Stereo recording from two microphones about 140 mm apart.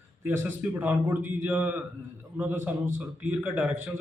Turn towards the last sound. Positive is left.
turn(degrees=-15)  # may be behind; listen again after turning